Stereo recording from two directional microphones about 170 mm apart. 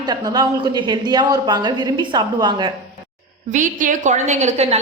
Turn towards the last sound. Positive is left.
turn(degrees=-40)  # may be behind; listen again after turning